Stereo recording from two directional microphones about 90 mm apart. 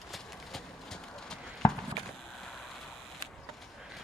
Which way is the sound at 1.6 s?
40° left (ahead or behind).